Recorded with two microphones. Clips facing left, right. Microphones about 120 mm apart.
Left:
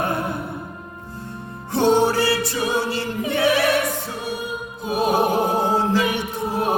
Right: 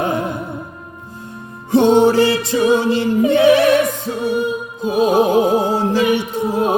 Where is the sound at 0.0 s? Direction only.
15° right (ahead or behind).